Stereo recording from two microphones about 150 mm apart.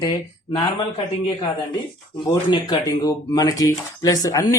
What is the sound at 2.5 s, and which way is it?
Speech, 30° left (ahead or behind).